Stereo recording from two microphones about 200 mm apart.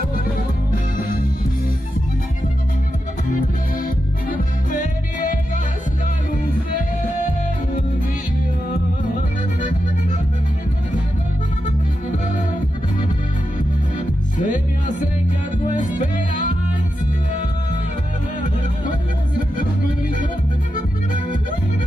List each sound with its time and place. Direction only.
3.3 s music: 45° left (ahead or behind)
13.6 s music: 40° left (ahead or behind)
15.7 s music: 40° left (ahead or behind)